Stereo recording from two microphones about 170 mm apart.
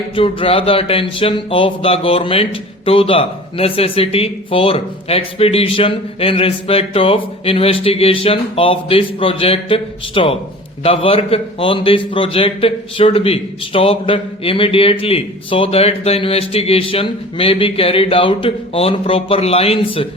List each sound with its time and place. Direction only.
0.2 s speech: 30° left (ahead or behind)